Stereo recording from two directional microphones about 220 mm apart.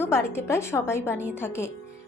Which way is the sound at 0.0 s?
10° left (ahead or behind).